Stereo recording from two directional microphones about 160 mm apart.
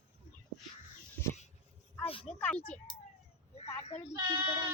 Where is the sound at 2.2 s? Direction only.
10° left (ahead or behind).